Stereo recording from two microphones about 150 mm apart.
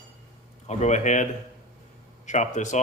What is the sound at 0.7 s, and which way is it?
Speech, 50° left (ahead or behind).